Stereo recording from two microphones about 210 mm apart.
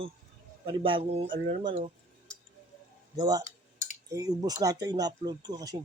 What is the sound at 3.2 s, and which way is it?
Speech, 20° right (ahead or behind).